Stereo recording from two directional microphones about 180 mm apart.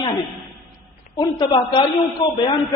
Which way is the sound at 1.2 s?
25° left (ahead or behind).